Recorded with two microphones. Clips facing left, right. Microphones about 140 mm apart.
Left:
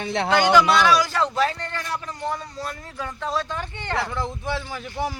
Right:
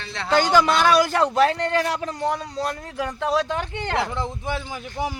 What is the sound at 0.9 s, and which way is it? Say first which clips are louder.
A man's voice: right 4 dB; 55° right (ahead or behind).